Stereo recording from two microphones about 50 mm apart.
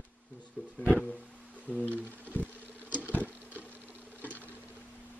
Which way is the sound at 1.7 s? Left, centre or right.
Left.